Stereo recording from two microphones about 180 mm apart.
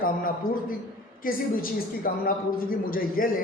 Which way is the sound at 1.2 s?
50° left (ahead or behind).